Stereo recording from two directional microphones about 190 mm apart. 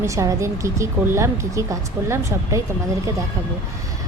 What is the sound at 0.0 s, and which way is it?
A woman's voice, 15° right (ahead or behind).